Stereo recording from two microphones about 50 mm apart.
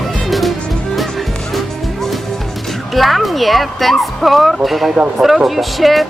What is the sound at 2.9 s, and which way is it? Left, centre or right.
Speech, centre.